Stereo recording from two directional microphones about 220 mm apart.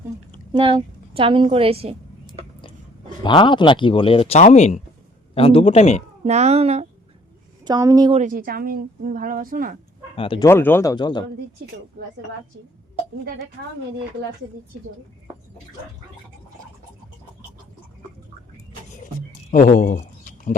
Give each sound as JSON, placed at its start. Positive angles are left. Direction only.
{"t": 0.5, "sound": "a woman's voice", "side_deg": -25}
{"t": 3.2, "sound": "speech", "side_deg": 20}
{"t": 6.2, "sound": "speech", "side_deg": -30}
{"t": 7.6, "sound": "speech", "side_deg": -15}
{"t": 8.2, "sound": "a woman's voice", "side_deg": -40}
{"t": 10.2, "sound": "speech", "side_deg": 25}
{"t": 10.5, "sound": "a man's voice", "side_deg": 10}
{"t": 12.0, "sound": "a woman's voice", "side_deg": -45}
{"t": 19.5, "sound": "a sound", "side_deg": 35}